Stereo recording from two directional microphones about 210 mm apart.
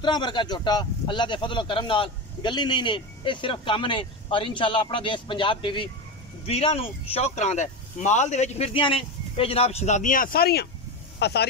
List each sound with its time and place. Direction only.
0.0 s speech: 20° left (ahead or behind); by 11.4 s 55° left (ahead or behind)